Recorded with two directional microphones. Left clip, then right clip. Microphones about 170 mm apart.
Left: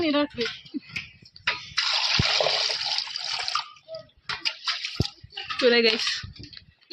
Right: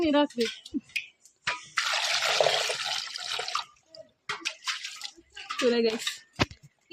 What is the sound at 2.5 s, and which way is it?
Water, 20° right (ahead or behind).